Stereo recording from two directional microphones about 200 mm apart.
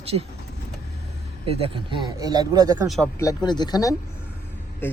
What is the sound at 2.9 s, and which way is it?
Speech, centre (ahead or behind).